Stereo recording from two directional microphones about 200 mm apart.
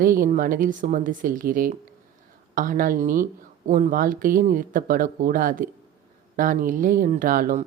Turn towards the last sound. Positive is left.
turn(degrees=-40)  # may be behind; listen again after turning